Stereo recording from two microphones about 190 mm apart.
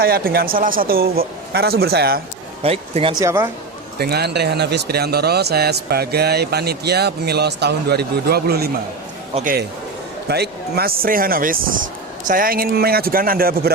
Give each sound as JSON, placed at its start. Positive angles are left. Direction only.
{"t": 0.0, "sound": "speech", "side_deg": -50}
{"t": 2.6, "sound": "speech", "side_deg": -30}
{"t": 3.2, "sound": "a man's voice", "side_deg": -15}
{"t": 3.9, "sound": "speech", "side_deg": -55}
{"t": 9.3, "sound": "speech", "side_deg": -45}
{"t": 10.2, "sound": "speech", "side_deg": -60}